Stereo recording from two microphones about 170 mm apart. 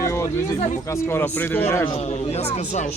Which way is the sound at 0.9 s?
15° left (ahead or behind).